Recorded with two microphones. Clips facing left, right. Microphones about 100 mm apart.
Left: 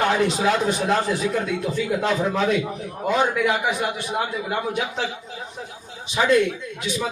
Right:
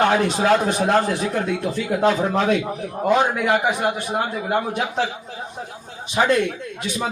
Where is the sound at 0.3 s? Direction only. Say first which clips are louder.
Right 3 dB; 50° right (ahead or behind).